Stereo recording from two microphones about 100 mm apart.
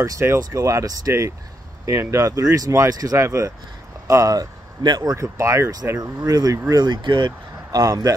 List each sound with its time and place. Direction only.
0.0 s speech: 25° right (ahead or behind); by 5.1 s 45° right (ahead or behind)
5.1 s speech: 30° right (ahead or behind)